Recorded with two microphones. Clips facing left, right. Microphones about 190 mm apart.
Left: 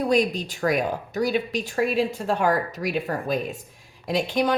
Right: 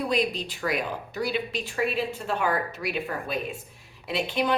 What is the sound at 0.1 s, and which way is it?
A woman's voice, 45° left (ahead or behind).